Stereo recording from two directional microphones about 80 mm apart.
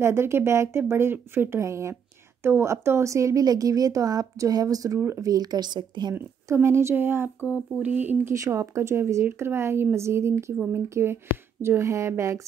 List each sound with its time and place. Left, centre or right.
0.0 s a woman's voice: right
4.9 s speech: right
5.2 s a woman's voice: right
6.1 s speech: right
7.4 s speech: centre
8.3 s speech: right